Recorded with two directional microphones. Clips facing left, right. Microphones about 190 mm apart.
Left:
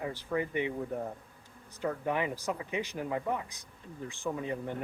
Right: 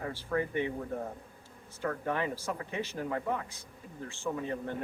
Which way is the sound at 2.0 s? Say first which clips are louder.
Left 2 dB; 15° left (ahead or behind).